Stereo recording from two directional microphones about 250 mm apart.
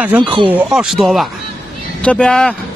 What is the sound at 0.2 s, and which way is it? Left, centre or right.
Speech, centre.